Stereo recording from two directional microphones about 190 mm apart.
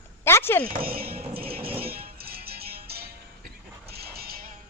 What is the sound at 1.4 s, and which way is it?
Music, 50° right (ahead or behind).